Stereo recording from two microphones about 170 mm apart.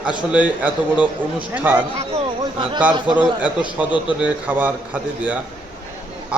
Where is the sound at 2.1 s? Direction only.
30° right (ahead or behind).